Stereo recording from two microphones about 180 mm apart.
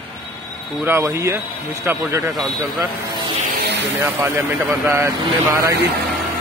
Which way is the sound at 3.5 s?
70° right (ahead or behind).